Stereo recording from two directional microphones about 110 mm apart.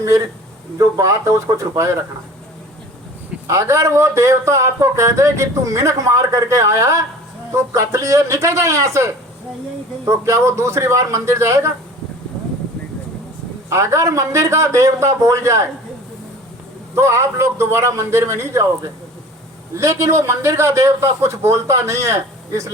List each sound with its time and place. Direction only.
0.8 s speech: 30° right (ahead or behind)
3.4 s speech: 30° right (ahead or behind)
10.1 s speech: 25° right (ahead or behind)
13.7 s speech: 25° right (ahead or behind)
16.9 s speech: 25° right (ahead or behind)
19.7 s speech: 30° right (ahead or behind)